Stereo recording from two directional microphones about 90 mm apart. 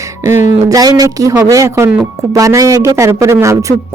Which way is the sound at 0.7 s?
45° right (ahead or behind).